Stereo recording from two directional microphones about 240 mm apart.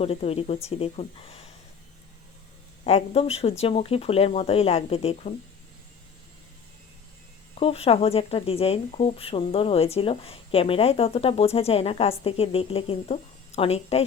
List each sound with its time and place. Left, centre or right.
0.0 s speech: left
2.8 s speech: left
7.5 s speech: left